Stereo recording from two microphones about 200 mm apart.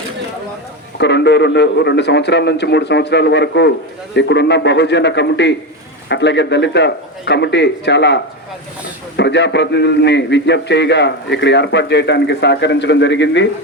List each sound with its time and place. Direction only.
0.9 s a man's voice: 60° left (ahead or behind)